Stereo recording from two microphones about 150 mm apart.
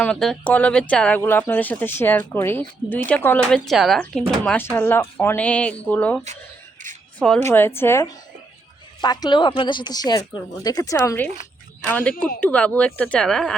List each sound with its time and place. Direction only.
0.0 s speech: 5° left (ahead or behind)
3.5 s speech: centre (ahead or behind)
6.8 s a sound: 60° right (ahead or behind)
7.4 s speech: 15° left (ahead or behind)
9.0 s speech: 30° left (ahead or behind); by 13.5 s 5° left (ahead or behind)